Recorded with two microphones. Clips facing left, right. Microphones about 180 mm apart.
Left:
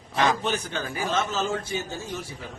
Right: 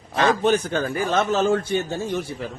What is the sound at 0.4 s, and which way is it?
A man's voice, 50° right (ahead or behind).